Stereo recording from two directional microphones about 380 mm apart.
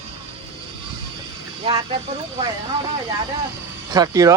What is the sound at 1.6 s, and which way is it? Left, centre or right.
Speech, centre.